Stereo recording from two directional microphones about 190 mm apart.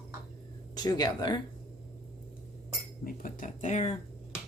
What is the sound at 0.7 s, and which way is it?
Speech, 20° left (ahead or behind).